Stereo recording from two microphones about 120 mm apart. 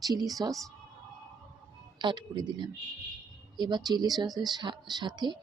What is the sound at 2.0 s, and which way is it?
A woman's voice, 40° right (ahead or behind).